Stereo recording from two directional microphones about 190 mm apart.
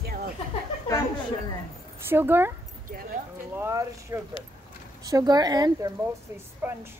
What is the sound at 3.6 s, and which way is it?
Speech, 15° right (ahead or behind).